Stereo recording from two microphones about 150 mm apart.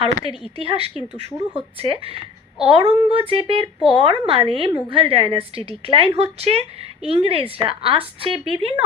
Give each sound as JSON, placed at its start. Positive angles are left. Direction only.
{"t": 0.0, "sound": "a woman's voice", "side_deg": -40}